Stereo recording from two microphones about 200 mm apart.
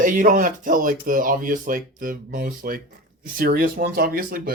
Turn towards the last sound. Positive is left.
turn(degrees=-45)  # may be behind; listen again after turning